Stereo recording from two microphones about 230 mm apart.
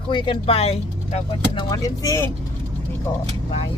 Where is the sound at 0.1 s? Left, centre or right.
Left.